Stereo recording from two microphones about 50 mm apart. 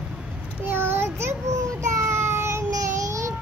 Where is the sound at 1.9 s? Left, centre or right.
Right.